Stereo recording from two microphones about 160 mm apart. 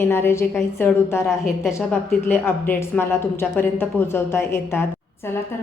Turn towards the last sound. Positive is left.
turn(degrees=15)  # may be behind; listen again after turning